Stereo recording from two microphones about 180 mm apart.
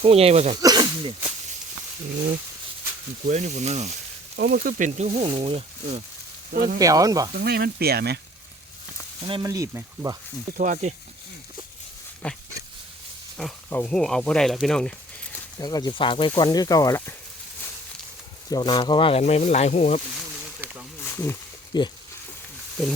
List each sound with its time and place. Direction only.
0.0 s speech: 35° right (ahead or behind)
0.5 s a sound: 25° right (ahead or behind)
3.2 s speech: 40° right (ahead or behind)
4.4 s speech: 60° right (ahead or behind); by 6.0 s 30° right (ahead or behind)
6.7 s speech: 20° right (ahead or behind)
7.3 s speech: 60° right (ahead or behind)
9.2 s speech: 25° right (ahead or behind)
10.6 s speech: 45° right (ahead or behind)
12.2 s dog: 5° left (ahead or behind)
13.7 s speech: 10° left (ahead or behind)
15.5 s speech: 20° left (ahead or behind)
18.4 s speech: 20° left (ahead or behind); by 20.0 s 35° left (ahead or behind)
20.1 s a sound: 5° right (ahead or behind)
21.0 s a sound: 15° left (ahead or behind)